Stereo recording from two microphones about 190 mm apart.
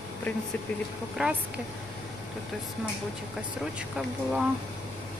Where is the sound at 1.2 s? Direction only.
5° right (ahead or behind).